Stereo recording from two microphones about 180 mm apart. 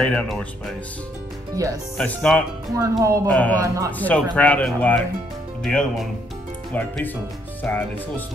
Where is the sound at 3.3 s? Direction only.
10° left (ahead or behind).